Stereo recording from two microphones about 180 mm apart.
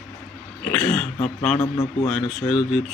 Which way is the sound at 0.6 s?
5° left (ahead or behind).